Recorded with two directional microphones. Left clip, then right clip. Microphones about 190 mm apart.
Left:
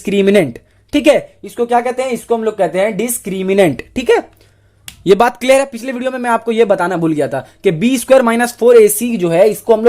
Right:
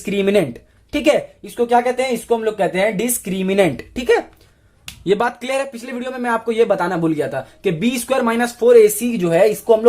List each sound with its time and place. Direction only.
0.0 s a man's voice: 40° left (ahead or behind)